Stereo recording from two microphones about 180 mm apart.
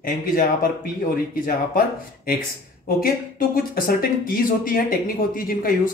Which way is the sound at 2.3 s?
55° left (ahead or behind).